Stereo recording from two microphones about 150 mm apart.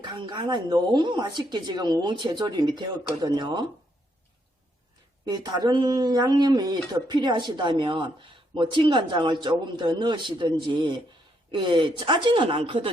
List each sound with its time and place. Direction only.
0.0 s speech: 30° right (ahead or behind)
5.3 s a man's voice: 30° right (ahead or behind)